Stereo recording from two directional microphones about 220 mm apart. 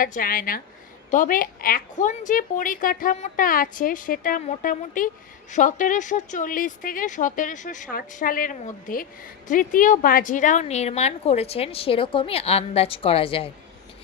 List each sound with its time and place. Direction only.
0.0 s a woman's voice: 40° left (ahead or behind)